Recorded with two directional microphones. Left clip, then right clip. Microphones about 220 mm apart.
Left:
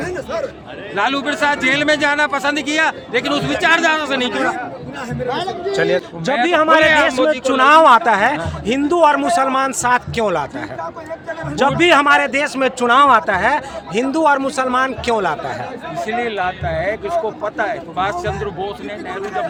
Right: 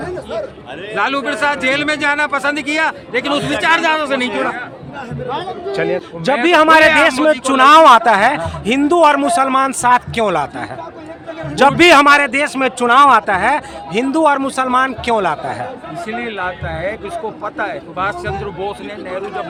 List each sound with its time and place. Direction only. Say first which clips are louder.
0.9 s a man's voice: right 1 dB; 5° right (ahead or behind)
5.7 s a man's voice: left 1 dB; centre (ahead or behind)
6.4 s speech: right 4 dB; 25° right (ahead or behind)
11.8 s a man's voice: right 3 dB; 25° right (ahead or behind)
16.0 s a man's voice: left 3 dB; centre (ahead or behind)